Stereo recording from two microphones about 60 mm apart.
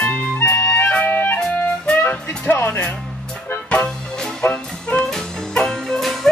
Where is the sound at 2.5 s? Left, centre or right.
Left.